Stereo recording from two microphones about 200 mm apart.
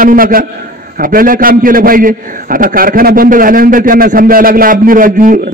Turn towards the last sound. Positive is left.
turn(degrees=-45)  # may be behind; listen again after turning